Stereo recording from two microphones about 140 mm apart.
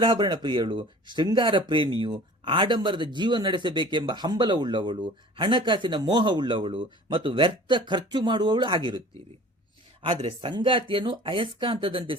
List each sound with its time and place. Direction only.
0.0 s speech: 30° right (ahead or behind)